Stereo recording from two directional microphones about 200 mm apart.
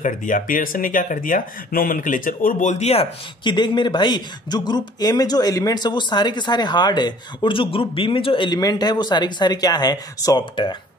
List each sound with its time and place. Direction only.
0.0 s speech: 40° left (ahead or behind); by 10.8 s 25° left (ahead or behind)